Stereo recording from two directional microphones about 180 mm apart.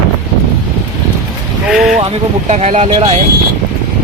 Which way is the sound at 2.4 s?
40° right (ahead or behind).